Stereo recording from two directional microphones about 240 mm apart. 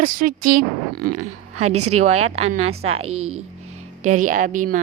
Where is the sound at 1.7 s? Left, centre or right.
Right.